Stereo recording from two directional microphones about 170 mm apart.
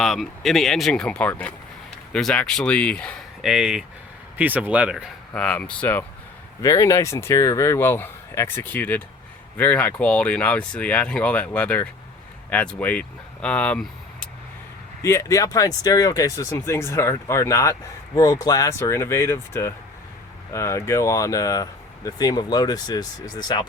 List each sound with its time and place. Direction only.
0.0 s speech: centre (ahead or behind)
5.3 s speech: 5° left (ahead or behind)
15.0 s speech: 20° left (ahead or behind)